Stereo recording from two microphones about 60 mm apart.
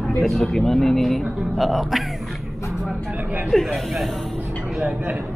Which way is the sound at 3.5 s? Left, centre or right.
Centre.